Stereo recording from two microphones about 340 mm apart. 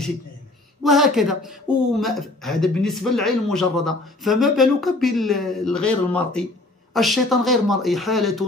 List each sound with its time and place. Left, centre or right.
0.8 s speech: centre